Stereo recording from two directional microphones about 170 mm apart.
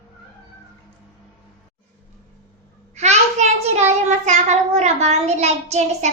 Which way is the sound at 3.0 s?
40° right (ahead or behind).